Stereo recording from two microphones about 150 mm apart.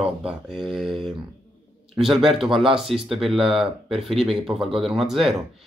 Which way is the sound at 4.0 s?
Centre (ahead or behind).